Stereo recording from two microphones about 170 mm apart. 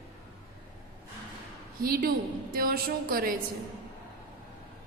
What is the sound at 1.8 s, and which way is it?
Speech, 60° right (ahead or behind).